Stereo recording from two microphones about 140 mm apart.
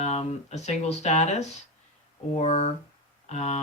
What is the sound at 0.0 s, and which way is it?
Speech, 50° left (ahead or behind).